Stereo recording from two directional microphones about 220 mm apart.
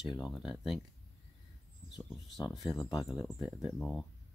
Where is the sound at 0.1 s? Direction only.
Centre (ahead or behind).